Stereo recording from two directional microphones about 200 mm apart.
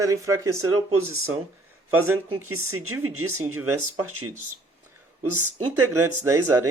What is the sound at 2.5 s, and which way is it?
Speech, 90° right.